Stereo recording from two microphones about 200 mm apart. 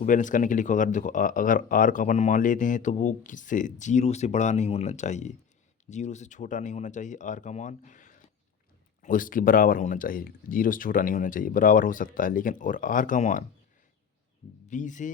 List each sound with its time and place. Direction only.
0.0 s speech: 40° left (ahead or behind)
14.7 s speech: 40° left (ahead or behind)